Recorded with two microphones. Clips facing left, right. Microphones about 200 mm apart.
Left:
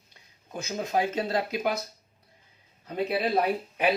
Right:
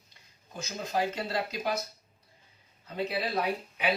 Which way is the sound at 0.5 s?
55° left (ahead or behind).